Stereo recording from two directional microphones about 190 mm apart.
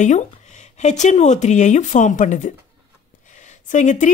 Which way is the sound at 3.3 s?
40° left (ahead or behind).